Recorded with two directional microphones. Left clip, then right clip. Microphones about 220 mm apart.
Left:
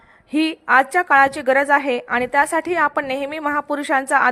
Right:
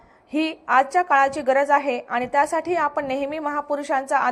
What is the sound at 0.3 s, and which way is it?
A woman's voice, 40° left (ahead or behind).